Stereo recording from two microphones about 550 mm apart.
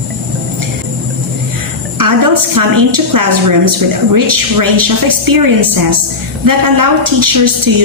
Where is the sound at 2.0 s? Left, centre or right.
Right.